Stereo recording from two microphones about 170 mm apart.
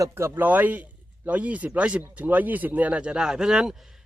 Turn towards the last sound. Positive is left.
turn(degrees=-5)  # may be behind; listen again after turning